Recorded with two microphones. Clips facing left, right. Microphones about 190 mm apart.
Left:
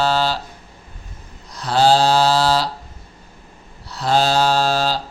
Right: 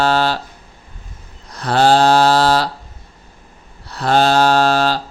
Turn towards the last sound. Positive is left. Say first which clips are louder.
# right 4 dB
turn(degrees=-60)  # may be behind; listen again after turning